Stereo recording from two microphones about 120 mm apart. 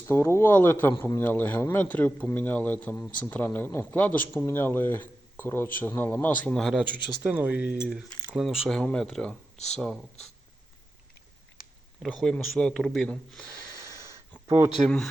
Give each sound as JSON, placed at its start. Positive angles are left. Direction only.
{"t": 0.1, "sound": "speech", "side_deg": 20}
{"t": 6.8, "sound": "speech", "side_deg": -15}
{"t": 8.4, "sound": "speech", "side_deg": 0}
{"t": 12.0, "sound": "speech", "side_deg": 5}
{"t": 13.6, "sound": "wheeze", "side_deg": -25}
{"t": 14.8, "sound": "speech", "side_deg": 5}